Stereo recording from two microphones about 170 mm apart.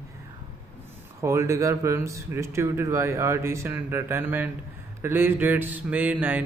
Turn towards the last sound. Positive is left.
turn(degrees=-10)  # may be behind; listen again after turning